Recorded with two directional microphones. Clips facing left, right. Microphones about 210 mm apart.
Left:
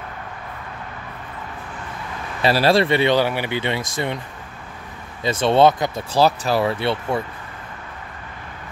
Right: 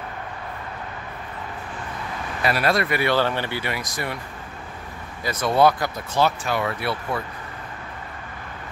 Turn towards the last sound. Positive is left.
turn(degrees=25)  # may be behind; listen again after turning